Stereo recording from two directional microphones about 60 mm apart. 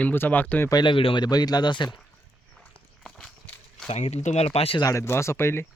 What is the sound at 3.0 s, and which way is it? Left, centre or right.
Walk, centre.